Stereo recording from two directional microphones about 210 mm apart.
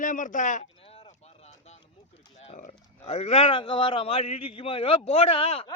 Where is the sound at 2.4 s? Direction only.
30° left (ahead or behind).